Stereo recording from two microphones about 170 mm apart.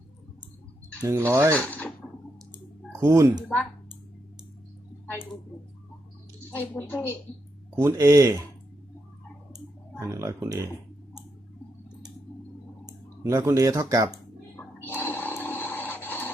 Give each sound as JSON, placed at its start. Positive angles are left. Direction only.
{"t": 1.0, "sound": "speech", "side_deg": -15}
{"t": 1.5, "sound": "speech", "side_deg": 10}
{"t": 3.0, "sound": "speech", "side_deg": -15}
{"t": 3.5, "sound": "a sound", "side_deg": 10}
{"t": 6.6, "sound": "speech", "side_deg": 10}
{"t": 7.8, "sound": "speech", "side_deg": -15}
{"t": 10.0, "sound": "speech", "side_deg": -15}
{"t": 12.8, "sound": "speech", "side_deg": -15}
{"t": 14.1, "sound": "a sound", "side_deg": 15}